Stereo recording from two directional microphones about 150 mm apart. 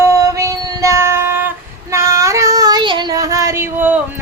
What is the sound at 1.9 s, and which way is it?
Child singing, 20° right (ahead or behind).